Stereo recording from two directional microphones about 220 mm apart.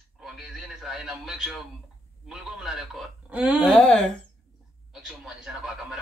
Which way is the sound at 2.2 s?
Centre (ahead or behind).